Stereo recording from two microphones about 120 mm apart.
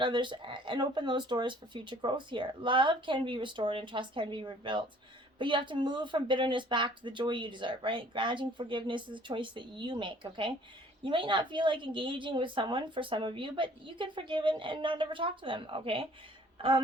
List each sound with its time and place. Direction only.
0.0 s speech: 40° right (ahead or behind)